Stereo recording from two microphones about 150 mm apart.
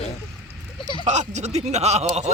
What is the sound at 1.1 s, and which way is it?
Speech, 50° right (ahead or behind).